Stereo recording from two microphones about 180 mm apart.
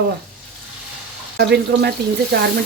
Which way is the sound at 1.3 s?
65° right (ahead or behind).